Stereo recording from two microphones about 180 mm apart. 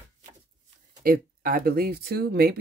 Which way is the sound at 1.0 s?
55° right (ahead or behind).